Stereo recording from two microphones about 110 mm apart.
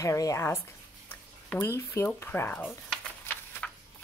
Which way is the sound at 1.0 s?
20° left (ahead or behind).